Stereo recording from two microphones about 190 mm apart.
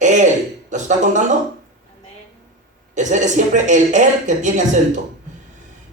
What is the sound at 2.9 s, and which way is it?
Speech, 40° right (ahead or behind).